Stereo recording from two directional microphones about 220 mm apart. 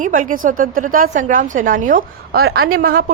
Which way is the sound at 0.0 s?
35° right (ahead or behind).